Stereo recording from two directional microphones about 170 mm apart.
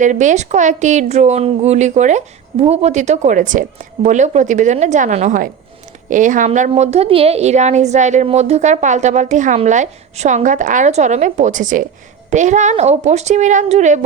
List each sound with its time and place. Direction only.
0.0 s a woman's voice: 45° right (ahead or behind)